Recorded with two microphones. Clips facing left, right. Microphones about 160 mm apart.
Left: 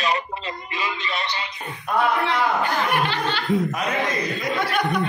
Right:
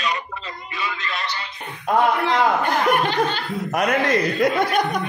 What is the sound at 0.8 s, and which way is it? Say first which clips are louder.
Speech: even; 20° left (ahead or behind).